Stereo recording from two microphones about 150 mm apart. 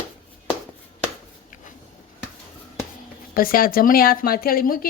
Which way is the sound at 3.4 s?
75° left (ahead or behind).